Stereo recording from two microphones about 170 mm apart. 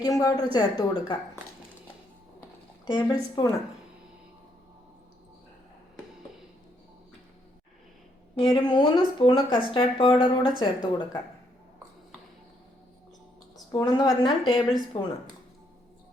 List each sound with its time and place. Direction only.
0.0 s speech: 20° left (ahead or behind)
2.8 s speech: 25° left (ahead or behind)
8.4 s speech: 25° left (ahead or behind)
13.7 s speech: 20° left (ahead or behind)